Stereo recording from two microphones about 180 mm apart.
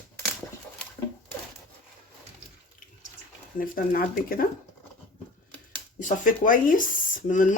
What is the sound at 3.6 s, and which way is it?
Speech, 50° left (ahead or behind).